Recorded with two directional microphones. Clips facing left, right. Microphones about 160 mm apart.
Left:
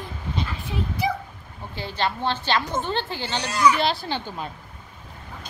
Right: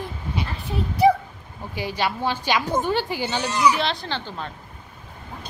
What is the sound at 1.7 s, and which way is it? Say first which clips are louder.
A woman's voice: right 1 dB; 10° right (ahead or behind).